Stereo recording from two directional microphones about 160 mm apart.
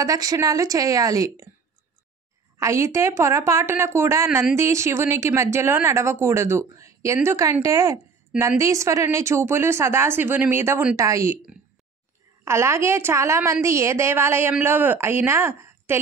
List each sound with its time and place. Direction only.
0.0 s a woman's voice: 20° right (ahead or behind)
2.5 s a woman's voice: 20° right (ahead or behind)
12.4 s a woman's voice: 15° right (ahead or behind)